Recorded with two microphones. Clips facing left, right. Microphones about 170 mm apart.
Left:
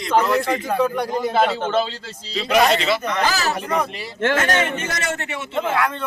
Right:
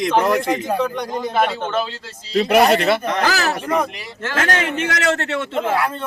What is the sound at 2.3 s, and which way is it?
Speech, 60° right (ahead or behind).